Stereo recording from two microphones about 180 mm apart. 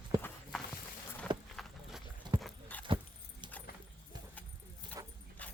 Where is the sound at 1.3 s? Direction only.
25° right (ahead or behind).